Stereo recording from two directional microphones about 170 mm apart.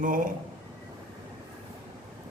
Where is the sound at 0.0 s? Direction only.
50° right (ahead or behind).